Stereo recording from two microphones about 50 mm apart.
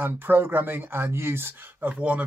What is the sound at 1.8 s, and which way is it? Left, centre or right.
Speech, right.